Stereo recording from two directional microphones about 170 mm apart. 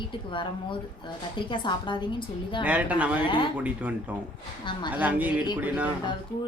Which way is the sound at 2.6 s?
10° right (ahead or behind).